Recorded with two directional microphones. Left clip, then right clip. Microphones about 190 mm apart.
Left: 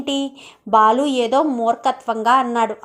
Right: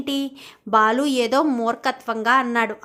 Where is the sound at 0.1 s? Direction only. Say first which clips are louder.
Left 4 dB; 10° right (ahead or behind).